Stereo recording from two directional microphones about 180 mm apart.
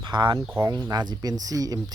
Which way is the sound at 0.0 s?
25° right (ahead or behind).